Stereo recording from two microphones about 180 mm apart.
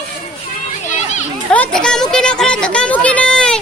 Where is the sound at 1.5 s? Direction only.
5° left (ahead or behind).